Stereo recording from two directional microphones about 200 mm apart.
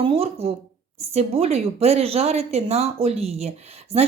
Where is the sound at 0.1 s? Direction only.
30° right (ahead or behind).